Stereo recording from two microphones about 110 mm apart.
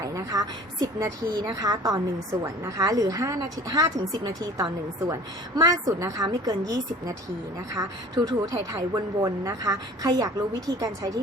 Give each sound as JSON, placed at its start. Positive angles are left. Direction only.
{"t": 0.0, "sound": "a woman's voice", "side_deg": -30}